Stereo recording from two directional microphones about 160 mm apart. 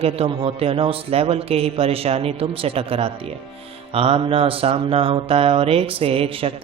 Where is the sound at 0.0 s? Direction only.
40° right (ahead or behind).